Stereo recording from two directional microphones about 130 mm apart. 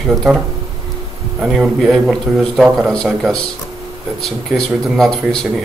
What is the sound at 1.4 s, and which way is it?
A man's voice, centre (ahead or behind).